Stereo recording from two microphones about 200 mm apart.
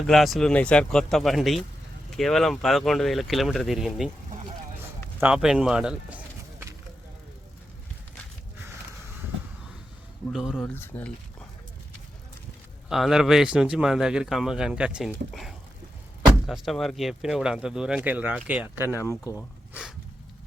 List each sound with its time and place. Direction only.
0.0 s speech: centre (ahead or behind)
5.2 s speech: 5° right (ahead or behind)
10.3 s speech: 5° right (ahead or behind)
10.8 s speech: 10° left (ahead or behind)
12.9 s speech: centre (ahead or behind)
18.9 s speech: 15° left (ahead or behind)